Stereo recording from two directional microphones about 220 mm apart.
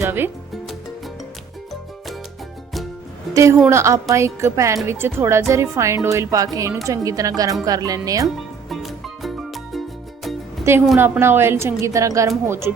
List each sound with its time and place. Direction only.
0.0 s music: 10° right (ahead or behind)
3.3 s speech: 15° right (ahead or behind)
8.4 s music: centre (ahead or behind)
10.7 s speech: 10° right (ahead or behind)